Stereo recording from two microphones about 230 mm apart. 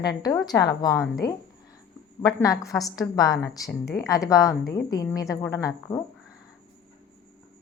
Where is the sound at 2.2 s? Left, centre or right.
Centre.